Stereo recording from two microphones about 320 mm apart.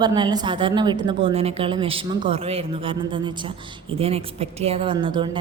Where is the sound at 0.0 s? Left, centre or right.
Centre.